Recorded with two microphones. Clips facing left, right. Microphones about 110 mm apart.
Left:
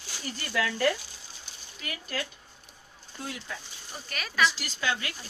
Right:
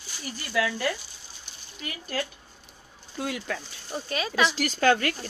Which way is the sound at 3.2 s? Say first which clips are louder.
Right 7 dB; 80° right.